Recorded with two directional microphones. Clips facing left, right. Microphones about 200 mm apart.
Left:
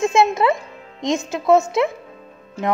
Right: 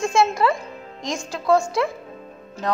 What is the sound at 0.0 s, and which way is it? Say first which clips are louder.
A woman's voice: left 3 dB; 20° left (ahead or behind).